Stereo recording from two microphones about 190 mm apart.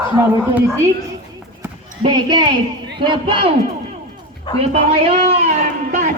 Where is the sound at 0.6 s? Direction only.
15° right (ahead or behind).